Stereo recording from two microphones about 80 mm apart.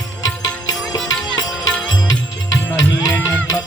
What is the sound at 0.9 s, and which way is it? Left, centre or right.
Music, left.